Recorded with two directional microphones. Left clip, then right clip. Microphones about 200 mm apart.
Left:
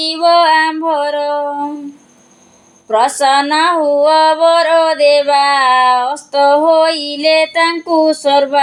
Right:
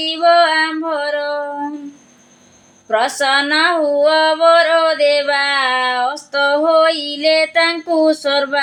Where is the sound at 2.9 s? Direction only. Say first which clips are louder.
Left 4 dB; 25° left (ahead or behind).